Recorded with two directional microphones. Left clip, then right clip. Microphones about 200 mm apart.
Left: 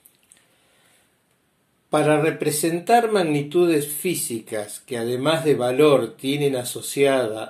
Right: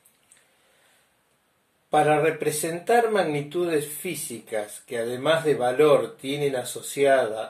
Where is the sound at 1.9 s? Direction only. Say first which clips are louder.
Left 1 dB; 25° left (ahead or behind).